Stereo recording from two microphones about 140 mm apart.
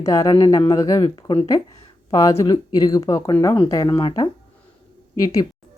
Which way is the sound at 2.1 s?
25° left (ahead or behind).